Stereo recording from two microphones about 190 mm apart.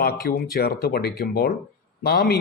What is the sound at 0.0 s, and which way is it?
A man's voice, 50° left (ahead or behind).